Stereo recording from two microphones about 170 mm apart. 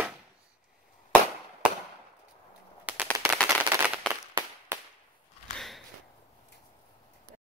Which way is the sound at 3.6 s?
10° right (ahead or behind).